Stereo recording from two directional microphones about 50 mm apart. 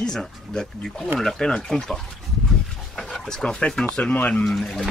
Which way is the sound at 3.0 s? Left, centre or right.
Centre.